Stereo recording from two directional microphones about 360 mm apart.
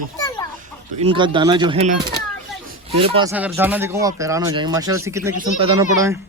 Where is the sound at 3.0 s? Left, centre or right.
Centre.